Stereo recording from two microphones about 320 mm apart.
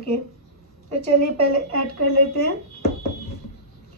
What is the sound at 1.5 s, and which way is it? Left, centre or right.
Speech, right.